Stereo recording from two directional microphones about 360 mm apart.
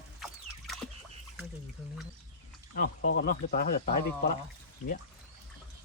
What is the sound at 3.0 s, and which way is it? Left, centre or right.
Speech, left.